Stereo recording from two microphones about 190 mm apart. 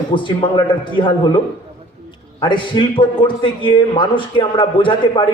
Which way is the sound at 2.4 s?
25° left (ahead or behind).